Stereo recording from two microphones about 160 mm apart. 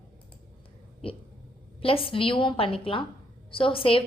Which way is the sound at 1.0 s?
35° left (ahead or behind).